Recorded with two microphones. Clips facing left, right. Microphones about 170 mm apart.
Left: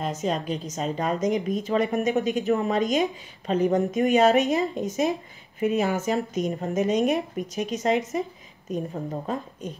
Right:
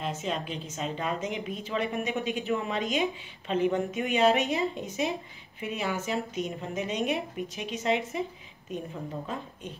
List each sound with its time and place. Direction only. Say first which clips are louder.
0.0 s a woman's voice: left 5 dB; 40° left (ahead or behind)